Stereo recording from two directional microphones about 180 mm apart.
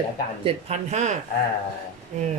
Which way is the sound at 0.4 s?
40° right (ahead or behind).